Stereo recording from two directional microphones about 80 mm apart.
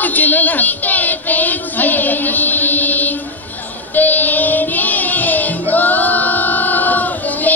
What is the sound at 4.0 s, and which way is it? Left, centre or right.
Child singing, left.